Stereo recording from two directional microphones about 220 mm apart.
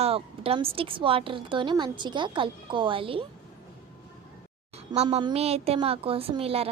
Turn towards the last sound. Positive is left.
turn(degrees=-25)  # may be behind; listen again after turning